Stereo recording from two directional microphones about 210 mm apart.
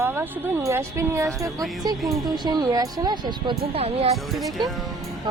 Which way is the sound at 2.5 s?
20° right (ahead or behind).